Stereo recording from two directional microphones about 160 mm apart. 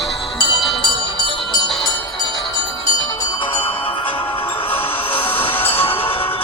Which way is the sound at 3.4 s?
35° left (ahead or behind).